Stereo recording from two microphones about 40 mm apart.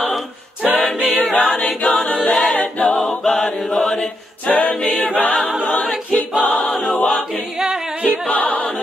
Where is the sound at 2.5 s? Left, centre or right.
Left.